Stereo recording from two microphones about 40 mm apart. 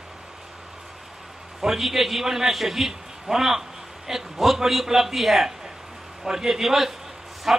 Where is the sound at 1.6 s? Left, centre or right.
Centre.